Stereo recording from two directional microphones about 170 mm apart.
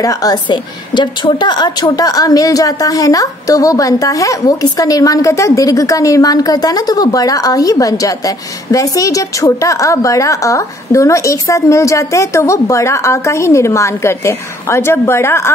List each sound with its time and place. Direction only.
0.0 s a woman's voice: 20° left (ahead or behind)